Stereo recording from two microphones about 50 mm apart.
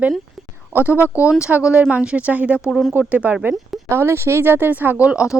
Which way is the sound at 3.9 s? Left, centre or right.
Right.